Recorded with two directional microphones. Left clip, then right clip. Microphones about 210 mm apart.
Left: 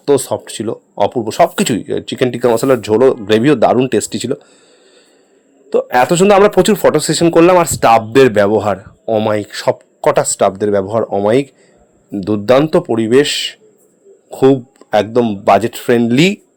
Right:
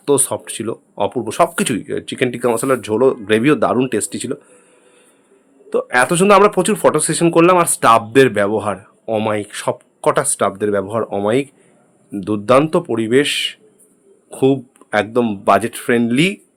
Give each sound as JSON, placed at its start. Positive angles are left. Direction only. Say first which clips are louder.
{"t": 0.0, "sound": "a man's voice", "louder": "left 3 dB", "side_deg": 5}
{"t": 5.6, "sound": "a man's voice", "louder": "left 3 dB", "side_deg": 15}